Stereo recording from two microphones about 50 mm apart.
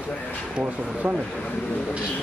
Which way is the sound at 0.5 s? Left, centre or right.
Right.